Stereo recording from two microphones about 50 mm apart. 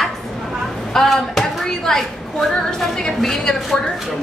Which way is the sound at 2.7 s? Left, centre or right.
Centre.